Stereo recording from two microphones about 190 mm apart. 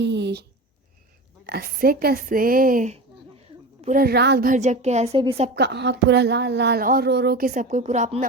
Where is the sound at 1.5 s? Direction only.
55° right (ahead or behind).